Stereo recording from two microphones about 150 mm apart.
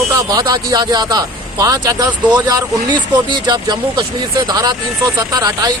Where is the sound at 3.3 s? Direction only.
30° right (ahead or behind).